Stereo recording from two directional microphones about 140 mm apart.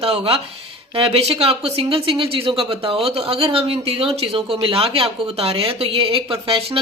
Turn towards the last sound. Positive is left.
turn(degrees=-40)  # may be behind; listen again after turning